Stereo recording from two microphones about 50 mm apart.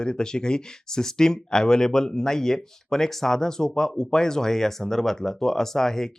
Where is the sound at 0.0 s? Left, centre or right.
Centre.